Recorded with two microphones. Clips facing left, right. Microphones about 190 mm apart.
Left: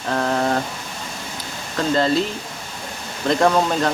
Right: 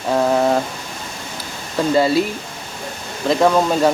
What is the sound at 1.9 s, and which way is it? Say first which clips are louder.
Speech: right 3 dB; 10° right (ahead or behind).